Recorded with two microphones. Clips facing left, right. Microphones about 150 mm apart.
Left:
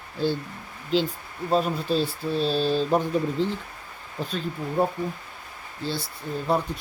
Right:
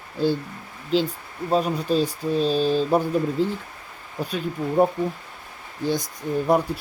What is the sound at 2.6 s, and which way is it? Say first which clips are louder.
Speech: right 3 dB; 45° right (ahead or behind).